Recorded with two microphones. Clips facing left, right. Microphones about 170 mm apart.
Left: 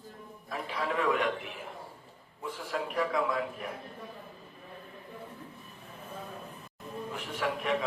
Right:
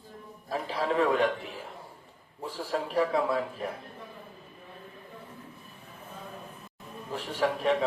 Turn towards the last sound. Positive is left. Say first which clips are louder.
# right 5 dB
turn(degrees=-35)  # may be behind; listen again after turning